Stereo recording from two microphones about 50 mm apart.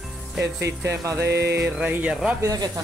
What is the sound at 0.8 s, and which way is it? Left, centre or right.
Music, right.